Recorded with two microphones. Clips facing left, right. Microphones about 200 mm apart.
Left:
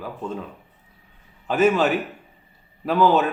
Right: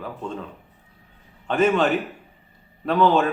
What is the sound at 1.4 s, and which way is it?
Speech, 5° left (ahead or behind).